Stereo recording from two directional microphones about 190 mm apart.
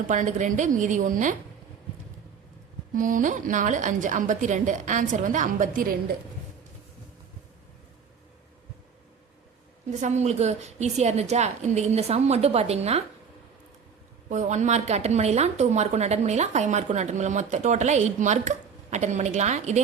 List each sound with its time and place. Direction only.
0.1 s a woman's voice: 40° right (ahead or behind)
2.9 s a woman's voice: 45° right (ahead or behind)
10.0 s a woman's voice: 35° right (ahead or behind)
14.3 s a woman's voice: 40° right (ahead or behind)